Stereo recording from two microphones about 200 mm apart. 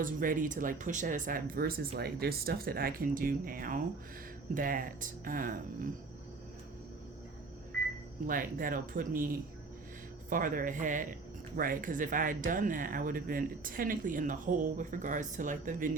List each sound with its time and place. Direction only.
0.0 s speech: 45° right (ahead or behind)
8.3 s speech: 45° right (ahead or behind)